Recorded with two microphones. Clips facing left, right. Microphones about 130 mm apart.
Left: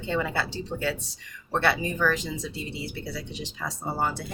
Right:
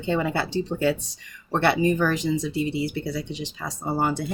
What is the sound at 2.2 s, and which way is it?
Speech, 65° right (ahead or behind).